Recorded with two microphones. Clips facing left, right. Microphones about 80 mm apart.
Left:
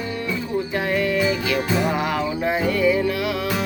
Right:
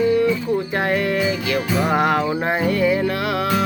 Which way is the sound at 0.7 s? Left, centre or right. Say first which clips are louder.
Left 1 dB; right.